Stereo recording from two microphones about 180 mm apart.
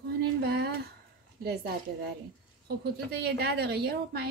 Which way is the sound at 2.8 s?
65° right (ahead or behind).